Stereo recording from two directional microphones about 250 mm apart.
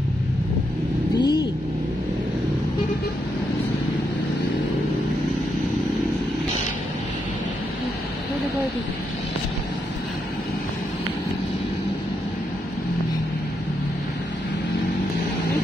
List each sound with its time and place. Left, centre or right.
1.2 s vehicle: centre